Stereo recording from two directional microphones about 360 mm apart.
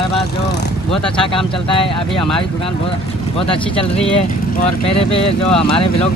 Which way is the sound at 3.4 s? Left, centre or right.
Centre.